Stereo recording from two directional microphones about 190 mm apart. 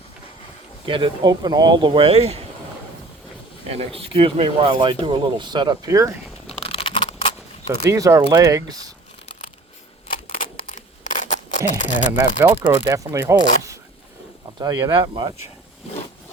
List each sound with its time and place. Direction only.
0.9 s speech: 25° right (ahead or behind)
3.7 s speech: 30° right (ahead or behind); by 6.1 s 15° right (ahead or behind)
6.6 s a sound: 30° left (ahead or behind)
7.9 s speech: 15° right (ahead or behind)
10.2 s a sound: 35° left (ahead or behind)
12.1 s speech: 10° right (ahead or behind)